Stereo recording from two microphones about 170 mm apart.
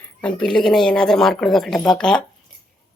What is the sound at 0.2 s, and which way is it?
Speech, 5° left (ahead or behind).